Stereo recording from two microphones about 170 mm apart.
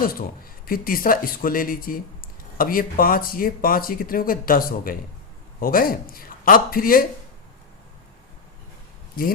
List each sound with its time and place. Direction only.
0.0 s speech: 60° left (ahead or behind)